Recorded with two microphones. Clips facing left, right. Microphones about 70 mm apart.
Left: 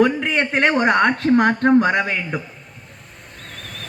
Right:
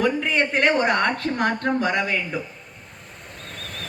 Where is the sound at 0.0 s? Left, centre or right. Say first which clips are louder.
Left 4 dB; left.